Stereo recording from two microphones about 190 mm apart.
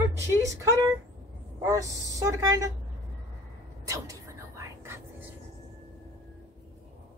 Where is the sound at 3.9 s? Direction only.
15° right (ahead or behind).